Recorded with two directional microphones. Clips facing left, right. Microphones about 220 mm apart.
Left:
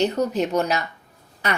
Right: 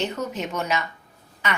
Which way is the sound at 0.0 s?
35° left (ahead or behind).